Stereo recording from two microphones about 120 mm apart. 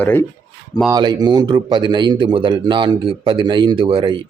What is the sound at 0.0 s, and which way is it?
Speech, 20° left (ahead or behind).